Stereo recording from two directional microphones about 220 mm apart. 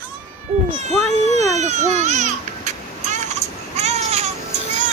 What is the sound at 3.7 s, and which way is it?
Baby cry, 30° right (ahead or behind).